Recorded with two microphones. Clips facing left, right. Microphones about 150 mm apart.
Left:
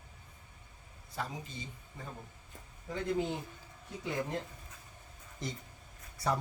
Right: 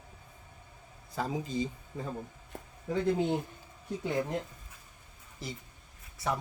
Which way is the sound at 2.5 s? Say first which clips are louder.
Right 10 dB; 65° right (ahead or behind).